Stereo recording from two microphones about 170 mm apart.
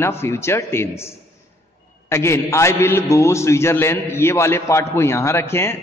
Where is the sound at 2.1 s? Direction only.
15° left (ahead or behind).